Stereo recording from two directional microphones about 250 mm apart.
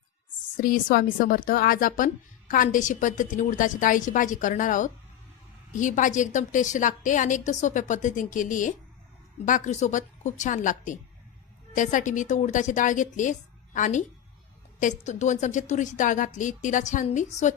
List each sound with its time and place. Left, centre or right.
0.5 s a woman's voice: left